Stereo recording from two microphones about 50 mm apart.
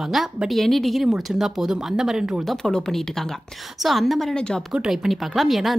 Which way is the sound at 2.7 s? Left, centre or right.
Centre.